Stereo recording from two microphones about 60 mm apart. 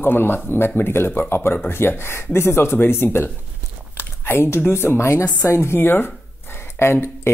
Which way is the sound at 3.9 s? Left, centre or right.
Left.